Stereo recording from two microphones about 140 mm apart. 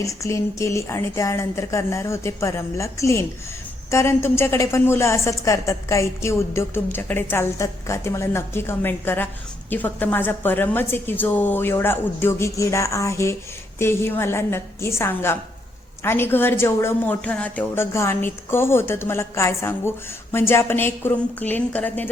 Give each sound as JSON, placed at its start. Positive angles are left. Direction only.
{"t": 0.0, "sound": "a woman's voice", "side_deg": 20}